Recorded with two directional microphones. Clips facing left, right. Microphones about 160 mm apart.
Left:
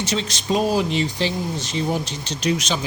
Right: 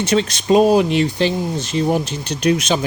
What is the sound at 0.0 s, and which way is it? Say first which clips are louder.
Speech: right 7 dB; 55° right (ahead or behind).